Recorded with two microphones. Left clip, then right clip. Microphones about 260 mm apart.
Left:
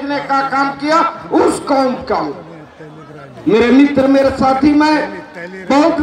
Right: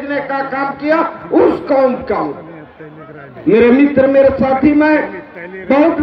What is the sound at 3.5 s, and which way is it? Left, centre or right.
Speech, left.